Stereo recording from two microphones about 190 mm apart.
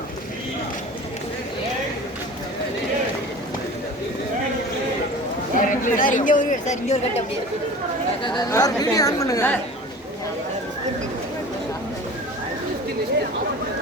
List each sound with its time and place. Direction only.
5.5 s speech: 45° left (ahead or behind)
8.4 s a woman's voice: 15° left (ahead or behind)